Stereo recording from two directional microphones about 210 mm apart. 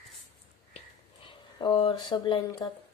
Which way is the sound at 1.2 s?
25° left (ahead or behind).